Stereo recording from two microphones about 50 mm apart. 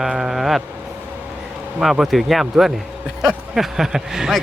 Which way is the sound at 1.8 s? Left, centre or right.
Centre.